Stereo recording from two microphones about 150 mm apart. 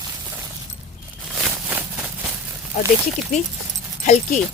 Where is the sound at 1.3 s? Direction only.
5° right (ahead or behind).